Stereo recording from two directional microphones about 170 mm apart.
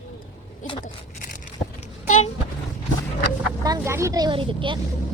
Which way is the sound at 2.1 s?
45° left (ahead or behind).